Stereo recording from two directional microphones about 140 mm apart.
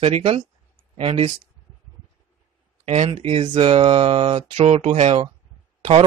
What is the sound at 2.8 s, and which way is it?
Speech, 45° right (ahead or behind).